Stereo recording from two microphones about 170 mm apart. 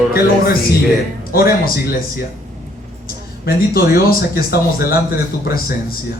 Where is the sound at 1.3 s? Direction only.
60° left (ahead or behind).